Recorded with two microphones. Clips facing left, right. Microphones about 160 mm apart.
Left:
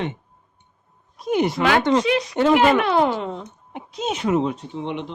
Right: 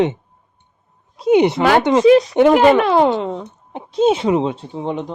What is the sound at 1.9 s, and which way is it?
Speech, 15° right (ahead or behind).